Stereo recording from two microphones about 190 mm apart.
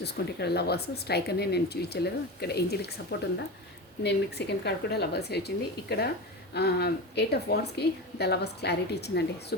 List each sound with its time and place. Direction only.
0.0 s a woman's voice: 60° left (ahead or behind)
6.5 s a woman's voice: 60° left (ahead or behind)